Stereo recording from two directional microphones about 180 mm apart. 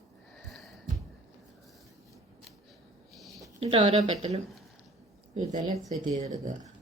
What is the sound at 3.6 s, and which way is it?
Speech, 30° right (ahead or behind).